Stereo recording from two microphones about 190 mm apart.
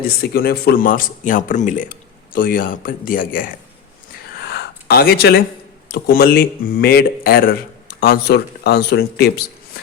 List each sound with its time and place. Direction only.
0.2 s a man's voice: 55° left (ahead or behind)
4.4 s a sound: 60° left (ahead or behind)
5.9 s speech: 50° left (ahead or behind)